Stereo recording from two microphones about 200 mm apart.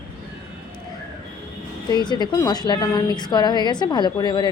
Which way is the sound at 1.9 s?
20° left (ahead or behind).